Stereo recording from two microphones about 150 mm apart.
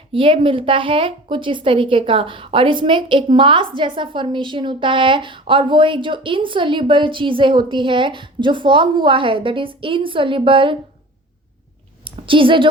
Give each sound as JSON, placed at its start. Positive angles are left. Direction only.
{"t": 0.1, "sound": "a woman's voice", "side_deg": -35}
{"t": 12.0, "sound": "a woman's voice", "side_deg": -35}